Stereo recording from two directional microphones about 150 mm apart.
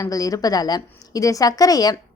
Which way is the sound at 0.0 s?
25° left (ahead or behind).